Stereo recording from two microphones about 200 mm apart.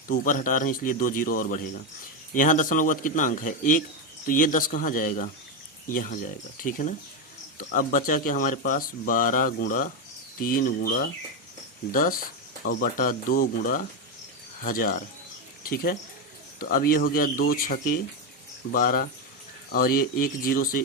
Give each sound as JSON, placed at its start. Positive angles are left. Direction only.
{"t": 0.1, "sound": "a man's voice", "side_deg": 40}